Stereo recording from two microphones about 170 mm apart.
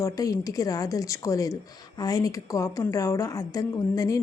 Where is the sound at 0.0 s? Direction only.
20° left (ahead or behind).